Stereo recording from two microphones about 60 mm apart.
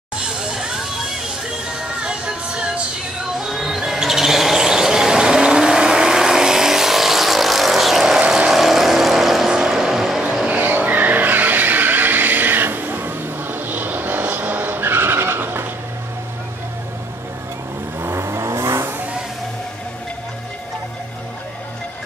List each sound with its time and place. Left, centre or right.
0.4 s a sound: centre
2.0 s music: centre
3.3 s music: centre
8.4 s vehicle: centre
10.4 s vehicle: right
18.0 s vehicle: right